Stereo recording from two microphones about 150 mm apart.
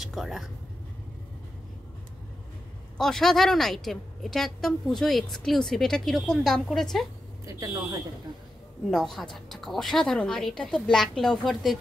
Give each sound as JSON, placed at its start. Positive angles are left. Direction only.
{"t": 0.0, "sound": "speech", "side_deg": 0}
{"t": 3.0, "sound": "a woman's voice", "side_deg": 5}
{"t": 7.4, "sound": "speech", "side_deg": -20}
{"t": 8.9, "sound": "a woman's voice", "side_deg": 0}